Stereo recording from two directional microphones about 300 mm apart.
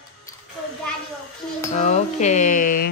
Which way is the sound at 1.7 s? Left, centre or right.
Left.